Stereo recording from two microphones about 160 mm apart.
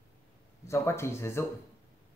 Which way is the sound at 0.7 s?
15° left (ahead or behind).